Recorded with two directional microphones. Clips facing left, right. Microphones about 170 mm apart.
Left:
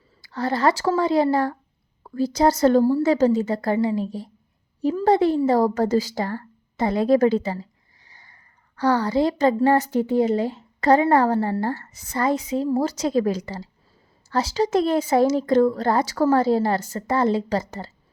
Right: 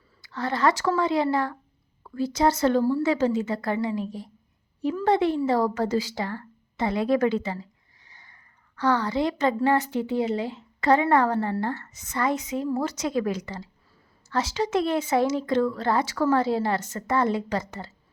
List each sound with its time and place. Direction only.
0.2 s a woman's voice: 35° left (ahead or behind)